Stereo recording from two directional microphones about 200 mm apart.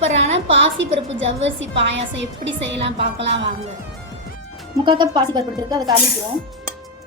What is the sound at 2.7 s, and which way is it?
Speech, 30° right (ahead or behind).